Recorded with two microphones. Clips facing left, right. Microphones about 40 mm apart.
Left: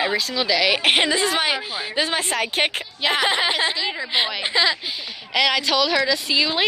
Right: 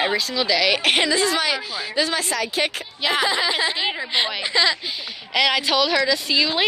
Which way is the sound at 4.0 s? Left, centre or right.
Centre.